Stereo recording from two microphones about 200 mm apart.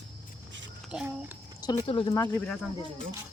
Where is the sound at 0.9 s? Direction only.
5° right (ahead or behind).